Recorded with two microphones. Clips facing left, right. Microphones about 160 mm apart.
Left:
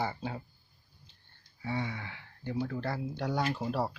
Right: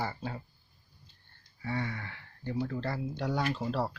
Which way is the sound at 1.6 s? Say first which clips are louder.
Even; 10° left (ahead or behind).